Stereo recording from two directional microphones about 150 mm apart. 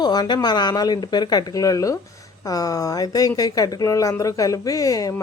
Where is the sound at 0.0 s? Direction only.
30° left (ahead or behind).